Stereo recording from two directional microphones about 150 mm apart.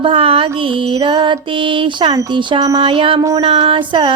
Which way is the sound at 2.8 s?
35° right (ahead or behind).